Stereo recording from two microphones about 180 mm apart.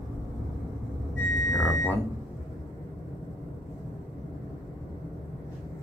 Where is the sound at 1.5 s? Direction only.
15° left (ahead or behind).